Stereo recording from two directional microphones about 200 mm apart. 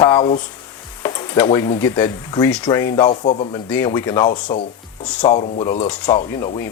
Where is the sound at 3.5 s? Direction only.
10° left (ahead or behind).